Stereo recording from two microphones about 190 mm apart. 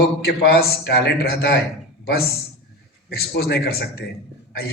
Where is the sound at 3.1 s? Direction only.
55° left (ahead or behind).